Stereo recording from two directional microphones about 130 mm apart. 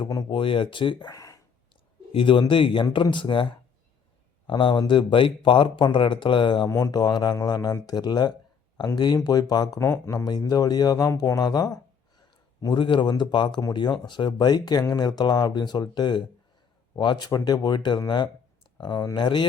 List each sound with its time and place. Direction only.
0.3 s speech: 40° left (ahead or behind)
1.7 s speech: 40° left (ahead or behind)
4.4 s speech: 40° left (ahead or behind)
6.7 s speech: 25° left (ahead or behind)
12.7 s speech: 40° left (ahead or behind)